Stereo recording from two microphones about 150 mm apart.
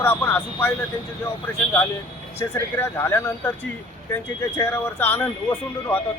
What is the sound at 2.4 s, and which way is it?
Speech, 15° left (ahead or behind).